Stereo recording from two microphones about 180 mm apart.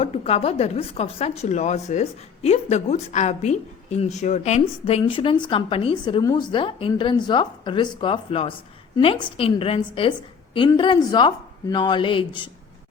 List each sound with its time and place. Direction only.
0.0 s a woman's voice: 35° left (ahead or behind)